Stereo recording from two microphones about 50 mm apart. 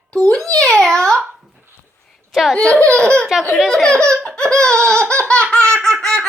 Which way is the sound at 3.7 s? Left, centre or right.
Centre.